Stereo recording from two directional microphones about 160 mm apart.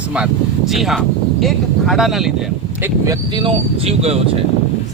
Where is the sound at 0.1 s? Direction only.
5° right (ahead or behind).